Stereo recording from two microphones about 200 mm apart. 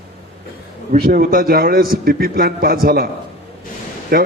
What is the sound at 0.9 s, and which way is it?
A man's voice, 45° right (ahead or behind).